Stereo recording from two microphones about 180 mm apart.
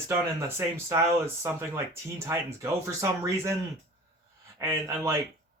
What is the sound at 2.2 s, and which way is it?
Speech, 15° right (ahead or behind).